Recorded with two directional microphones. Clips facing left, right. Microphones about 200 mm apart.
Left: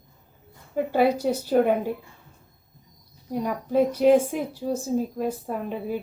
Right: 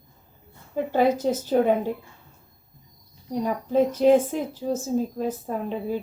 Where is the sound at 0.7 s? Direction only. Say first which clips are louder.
Even; 10° left (ahead or behind).